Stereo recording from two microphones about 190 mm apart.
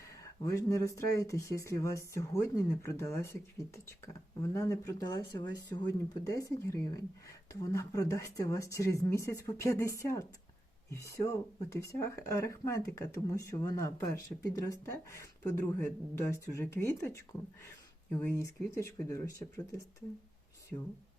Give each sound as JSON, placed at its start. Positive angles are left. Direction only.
{"t": 0.0, "sound": "speech", "side_deg": 15}